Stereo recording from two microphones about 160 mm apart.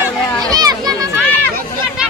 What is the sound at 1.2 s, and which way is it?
Chatter, 10° left (ahead or behind).